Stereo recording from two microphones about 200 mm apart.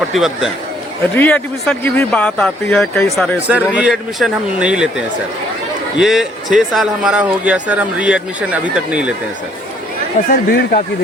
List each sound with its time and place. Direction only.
0.1 s speech: centre (ahead or behind)
3.4 s speech: 5° right (ahead or behind)
10.2 s speech: 45° left (ahead or behind)